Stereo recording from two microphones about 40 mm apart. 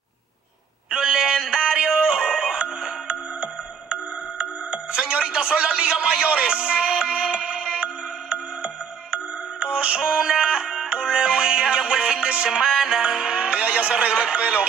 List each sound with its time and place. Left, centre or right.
0.8 s music: right
9.9 s music: right
12.4 s music: centre
14.1 s speech: right